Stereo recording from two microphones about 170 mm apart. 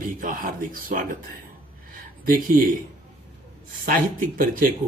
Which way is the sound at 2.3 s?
55° right (ahead or behind).